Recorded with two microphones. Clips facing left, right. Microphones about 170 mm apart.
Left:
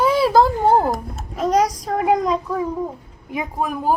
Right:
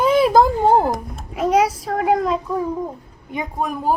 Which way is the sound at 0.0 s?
20° right (ahead or behind).